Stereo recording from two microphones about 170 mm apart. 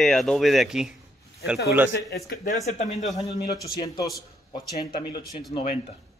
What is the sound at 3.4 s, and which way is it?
Speech, 65° left (ahead or behind).